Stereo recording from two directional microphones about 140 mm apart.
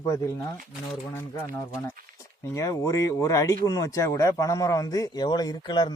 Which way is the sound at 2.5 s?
25° left (ahead or behind).